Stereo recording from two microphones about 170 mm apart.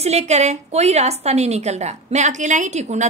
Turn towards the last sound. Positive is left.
turn(degrees=-40)  # may be behind; listen again after turning